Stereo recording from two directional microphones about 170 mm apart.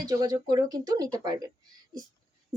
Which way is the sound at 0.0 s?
20° right (ahead or behind).